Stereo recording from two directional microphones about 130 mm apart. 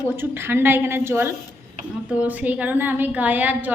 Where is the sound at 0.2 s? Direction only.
15° right (ahead or behind).